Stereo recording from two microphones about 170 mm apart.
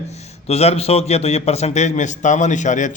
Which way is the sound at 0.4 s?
40° left (ahead or behind).